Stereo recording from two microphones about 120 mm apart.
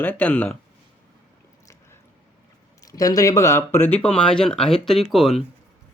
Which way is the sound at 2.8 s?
30° left (ahead or behind).